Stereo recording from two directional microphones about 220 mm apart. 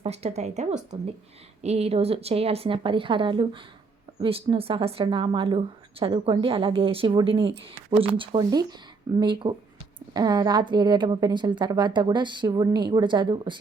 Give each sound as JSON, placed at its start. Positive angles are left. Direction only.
{"t": 0.0, "sound": "speech", "side_deg": -30}